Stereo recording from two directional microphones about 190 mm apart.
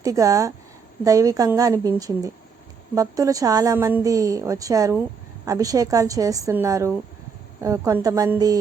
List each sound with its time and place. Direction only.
0.0 s a woman's voice: 20° right (ahead or behind)